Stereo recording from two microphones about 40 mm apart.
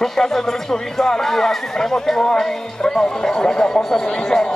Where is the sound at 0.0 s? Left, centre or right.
Centre.